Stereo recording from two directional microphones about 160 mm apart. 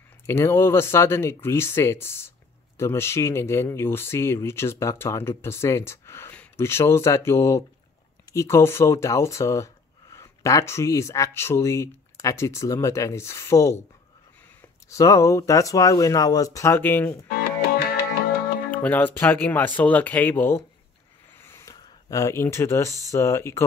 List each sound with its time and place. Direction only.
0.3 s speech: 15° left (ahead or behind)
14.9 s speech: 20° left (ahead or behind)
17.3 s music: 75° left (ahead or behind)
18.7 s speech: 10° left (ahead or behind)
21.4 s a sound: 15° left (ahead or behind)
23.1 s speech: 15° left (ahead or behind)